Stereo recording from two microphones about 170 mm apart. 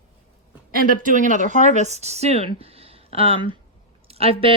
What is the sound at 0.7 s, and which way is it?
A woman's voice, 55° right (ahead or behind).